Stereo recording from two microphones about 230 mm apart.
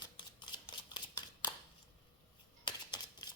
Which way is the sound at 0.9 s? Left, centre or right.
Centre.